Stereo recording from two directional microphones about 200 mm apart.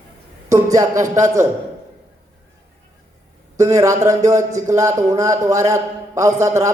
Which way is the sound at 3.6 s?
15° right (ahead or behind).